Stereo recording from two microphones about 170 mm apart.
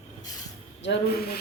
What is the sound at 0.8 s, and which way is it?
Speech, 90° left.